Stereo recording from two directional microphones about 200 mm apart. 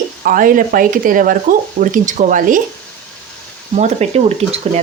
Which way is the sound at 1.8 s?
40° right (ahead or behind).